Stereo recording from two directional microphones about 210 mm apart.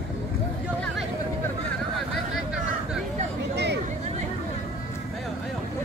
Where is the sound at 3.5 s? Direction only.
55° right (ahead or behind).